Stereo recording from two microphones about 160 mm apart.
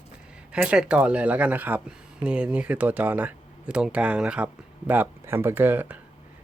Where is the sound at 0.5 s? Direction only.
5° right (ahead or behind).